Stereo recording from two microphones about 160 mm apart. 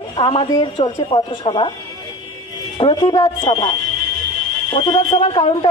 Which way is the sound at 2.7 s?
35° left (ahead or behind).